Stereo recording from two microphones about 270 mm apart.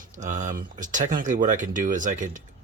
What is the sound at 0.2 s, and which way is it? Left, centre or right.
Speech, right.